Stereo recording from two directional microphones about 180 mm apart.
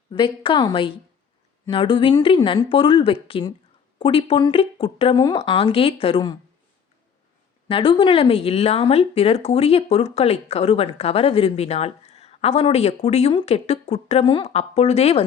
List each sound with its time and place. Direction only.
0.1 s speech: 25° left (ahead or behind)
7.7 s speech: 30° left (ahead or behind)